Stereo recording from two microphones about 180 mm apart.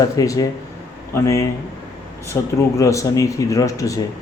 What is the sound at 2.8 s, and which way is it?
Speech, 15° left (ahead or behind).